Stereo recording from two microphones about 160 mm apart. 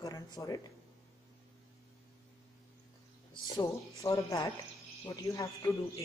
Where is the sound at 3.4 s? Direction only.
25° left (ahead or behind).